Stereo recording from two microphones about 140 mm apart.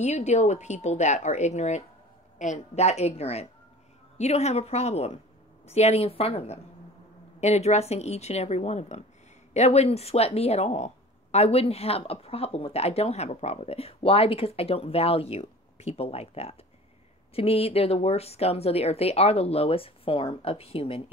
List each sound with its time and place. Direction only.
0.0 s speech: 55° left (ahead or behind)